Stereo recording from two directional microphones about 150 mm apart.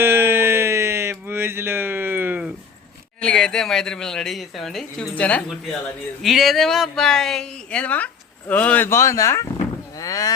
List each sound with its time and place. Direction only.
0.0 s music: 15° right (ahead or behind)
3.2 s speech: 5° left (ahead or behind)
6.2 s speech: centre (ahead or behind); by 10.3 s 25° left (ahead or behind)